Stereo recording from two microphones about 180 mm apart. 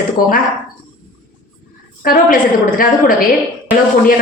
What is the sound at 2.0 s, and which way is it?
A woman's voice, 55° left (ahead or behind).